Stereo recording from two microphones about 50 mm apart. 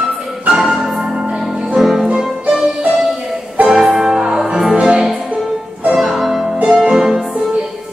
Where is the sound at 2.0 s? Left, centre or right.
Centre.